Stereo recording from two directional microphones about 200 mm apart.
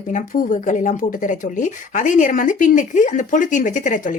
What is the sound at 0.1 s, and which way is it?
Speech, 40° left (ahead or behind).